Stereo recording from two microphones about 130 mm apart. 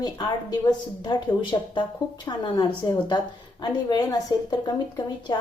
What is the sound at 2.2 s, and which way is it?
A woman's voice, 30° left (ahead or behind).